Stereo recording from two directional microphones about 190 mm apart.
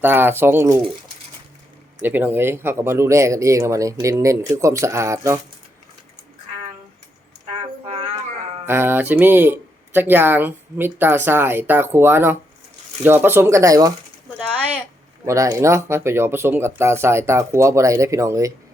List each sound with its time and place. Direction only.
0.0 s speech: 10° right (ahead or behind)
2.0 s speech: 10° right (ahead or behind)
8.6 s speech: 10° right (ahead or behind)
15.3 s speech: 15° right (ahead or behind)